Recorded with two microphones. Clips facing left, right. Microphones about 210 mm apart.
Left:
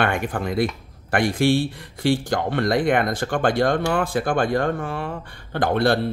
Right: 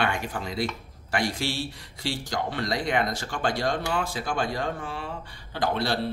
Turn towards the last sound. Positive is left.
turn(degrees=55)  # may be behind; listen again after turning